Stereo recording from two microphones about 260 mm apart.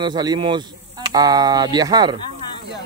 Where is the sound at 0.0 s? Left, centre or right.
Centre.